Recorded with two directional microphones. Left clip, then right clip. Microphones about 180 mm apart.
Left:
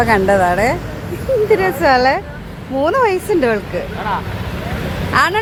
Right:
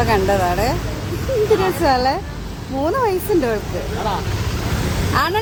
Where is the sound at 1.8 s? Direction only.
20° left (ahead or behind).